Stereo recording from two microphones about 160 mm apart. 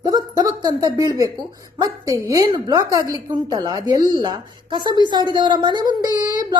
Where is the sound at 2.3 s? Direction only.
25° right (ahead or behind).